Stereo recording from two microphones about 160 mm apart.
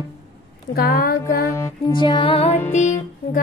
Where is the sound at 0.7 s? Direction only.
75° left (ahead or behind).